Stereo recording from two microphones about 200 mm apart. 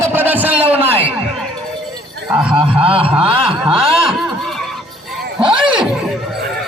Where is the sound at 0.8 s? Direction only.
30° right (ahead or behind).